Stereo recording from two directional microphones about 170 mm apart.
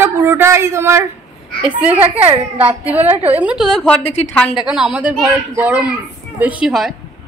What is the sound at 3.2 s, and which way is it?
A woman's voice, 10° right (ahead or behind).